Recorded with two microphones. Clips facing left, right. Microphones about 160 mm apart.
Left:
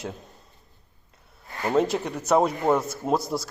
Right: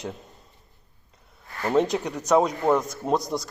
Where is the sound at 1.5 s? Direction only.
15° left (ahead or behind).